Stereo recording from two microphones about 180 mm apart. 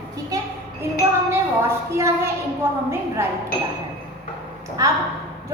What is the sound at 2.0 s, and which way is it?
A woman's voice, 15° right (ahead or behind).